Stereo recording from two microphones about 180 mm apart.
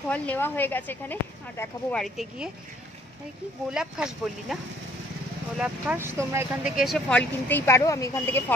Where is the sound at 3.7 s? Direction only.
5° right (ahead or behind).